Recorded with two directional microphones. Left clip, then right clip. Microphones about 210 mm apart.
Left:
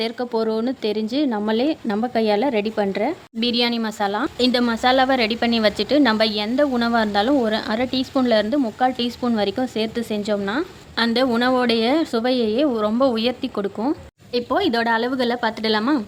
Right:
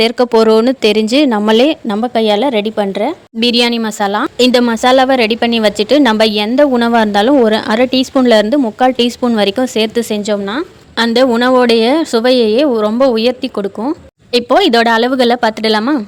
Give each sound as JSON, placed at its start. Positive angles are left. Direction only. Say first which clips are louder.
{"t": 0.0, "sound": "speech", "louder": "right 13 dB", "side_deg": -40}
{"t": 2.0, "sound": "a woman's voice", "louder": "right 7 dB", "side_deg": -25}
{"t": 3.4, "sound": "speech", "louder": "right 9 dB", "side_deg": -35}
{"t": 14.3, "sound": "a woman's voice", "louder": "right 11 dB", "side_deg": -45}